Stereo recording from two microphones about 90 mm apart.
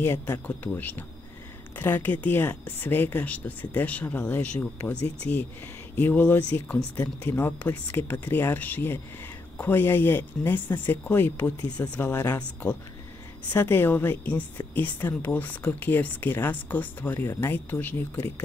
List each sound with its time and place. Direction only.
0.0 s speech: 25° left (ahead or behind)
12.0 s speech: 30° left (ahead or behind)
13.5 s speech: 25° left (ahead or behind)